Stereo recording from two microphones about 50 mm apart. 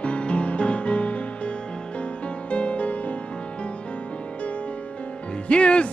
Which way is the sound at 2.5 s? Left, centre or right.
Left.